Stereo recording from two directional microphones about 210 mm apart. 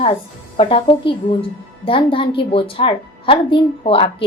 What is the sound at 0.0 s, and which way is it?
A woman's voice, 25° left (ahead or behind).